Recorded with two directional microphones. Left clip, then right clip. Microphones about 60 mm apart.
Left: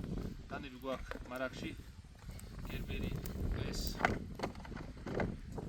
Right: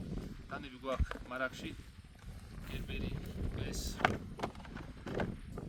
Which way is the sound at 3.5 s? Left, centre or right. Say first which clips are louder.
Even; right.